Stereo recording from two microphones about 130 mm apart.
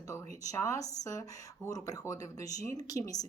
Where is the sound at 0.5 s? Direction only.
25° left (ahead or behind).